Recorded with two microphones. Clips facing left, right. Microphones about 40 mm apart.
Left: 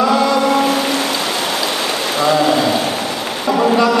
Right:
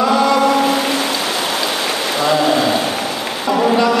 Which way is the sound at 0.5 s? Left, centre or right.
Centre.